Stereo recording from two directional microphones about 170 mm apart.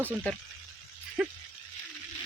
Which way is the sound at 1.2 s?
5° right (ahead or behind).